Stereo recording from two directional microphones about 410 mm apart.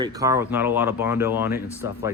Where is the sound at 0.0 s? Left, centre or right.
Centre.